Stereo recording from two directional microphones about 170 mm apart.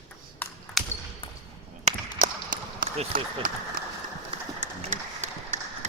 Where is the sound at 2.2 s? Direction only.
55° right (ahead or behind).